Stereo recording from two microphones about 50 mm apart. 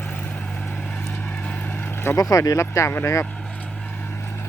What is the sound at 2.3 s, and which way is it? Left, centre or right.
Speech, left.